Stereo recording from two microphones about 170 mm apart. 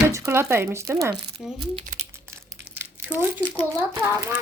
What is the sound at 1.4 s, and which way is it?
Speech, centre (ahead or behind).